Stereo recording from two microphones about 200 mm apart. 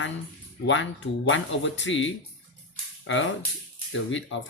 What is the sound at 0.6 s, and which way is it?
Speech, 65° left (ahead or behind).